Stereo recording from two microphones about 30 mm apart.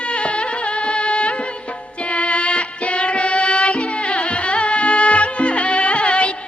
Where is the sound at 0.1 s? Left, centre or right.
Left.